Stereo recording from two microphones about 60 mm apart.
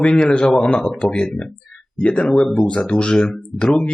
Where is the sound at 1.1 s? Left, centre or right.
Centre.